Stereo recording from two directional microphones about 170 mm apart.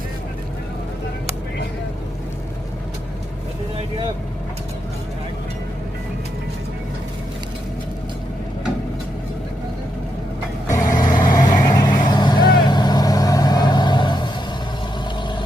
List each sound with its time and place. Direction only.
10.8 s vehicle: 50° left (ahead or behind)
11.4 s vehicle: 25° left (ahead or behind)